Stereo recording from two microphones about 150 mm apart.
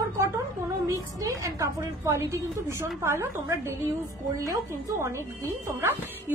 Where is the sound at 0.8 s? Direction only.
20° right (ahead or behind).